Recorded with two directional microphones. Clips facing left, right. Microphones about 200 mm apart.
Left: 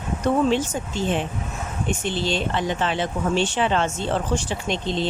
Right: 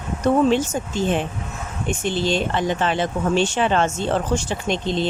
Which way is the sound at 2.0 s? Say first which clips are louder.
Right 5 dB; 45° right (ahead or behind).